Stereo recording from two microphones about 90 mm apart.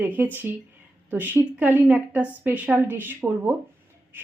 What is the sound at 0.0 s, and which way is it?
A woman's voice, 20° right (ahead or behind).